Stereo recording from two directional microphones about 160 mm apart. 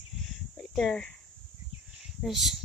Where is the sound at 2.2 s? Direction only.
Centre (ahead or behind).